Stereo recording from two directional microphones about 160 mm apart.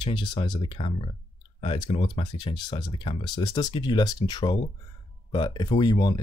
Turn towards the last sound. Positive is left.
turn(degrees=25)  # may be behind; listen again after turning